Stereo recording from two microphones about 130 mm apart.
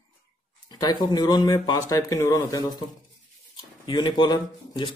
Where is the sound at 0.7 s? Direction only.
30° left (ahead or behind).